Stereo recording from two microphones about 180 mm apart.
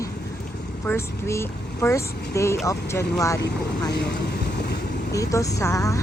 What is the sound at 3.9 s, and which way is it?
Vehicle, 70° left (ahead or behind).